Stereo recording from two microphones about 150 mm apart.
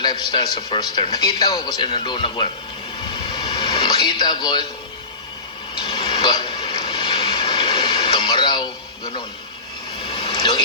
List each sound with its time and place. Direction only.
0.0 s a man's voice: 30° left (ahead or behind)
3.1 s television: 30° left (ahead or behind)
5.8 s vehicle: 30° left (ahead or behind)
10.0 s vehicle: 35° left (ahead or behind)